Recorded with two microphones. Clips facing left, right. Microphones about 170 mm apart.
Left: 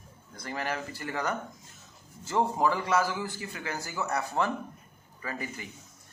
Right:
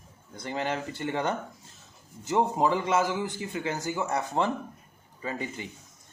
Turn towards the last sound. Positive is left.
turn(degrees=-25)  # may be behind; listen again after turning